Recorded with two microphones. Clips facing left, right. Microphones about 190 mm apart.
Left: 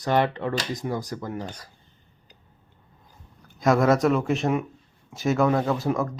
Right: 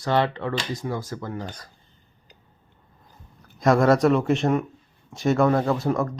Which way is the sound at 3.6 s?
Centre (ahead or behind).